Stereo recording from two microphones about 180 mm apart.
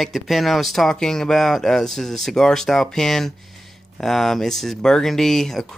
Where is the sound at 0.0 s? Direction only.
Centre (ahead or behind).